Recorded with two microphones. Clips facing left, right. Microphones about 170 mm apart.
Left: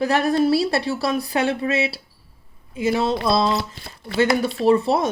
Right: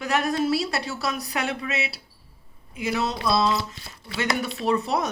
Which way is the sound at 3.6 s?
55° left (ahead or behind).